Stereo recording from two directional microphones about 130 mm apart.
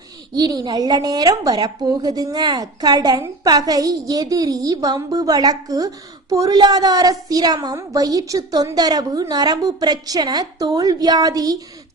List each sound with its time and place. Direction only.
0.3 s a woman's voice: 30° right (ahead or behind)